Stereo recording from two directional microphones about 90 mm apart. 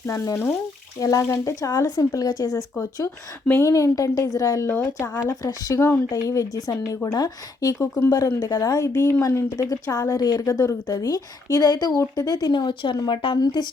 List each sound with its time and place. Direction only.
0.0 s a woman's voice: 30° left (ahead or behind)
0.9 s a woman's voice: 40° left (ahead or behind)
3.6 s a woman's voice: 35° left (ahead or behind)
6.1 s a woman's voice: 40° left (ahead or behind)